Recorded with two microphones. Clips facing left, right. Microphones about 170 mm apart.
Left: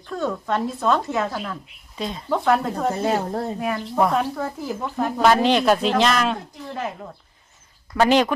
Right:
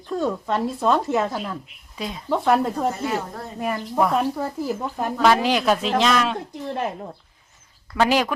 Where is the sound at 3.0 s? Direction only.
40° left (ahead or behind).